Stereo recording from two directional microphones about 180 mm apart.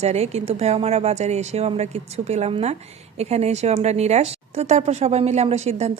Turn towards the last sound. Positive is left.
turn(degrees=-40)  # may be behind; listen again after turning